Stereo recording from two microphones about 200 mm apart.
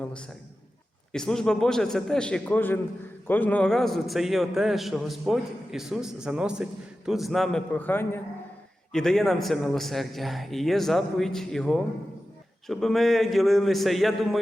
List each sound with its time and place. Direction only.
1.1 s a man's voice: 5° left (ahead or behind)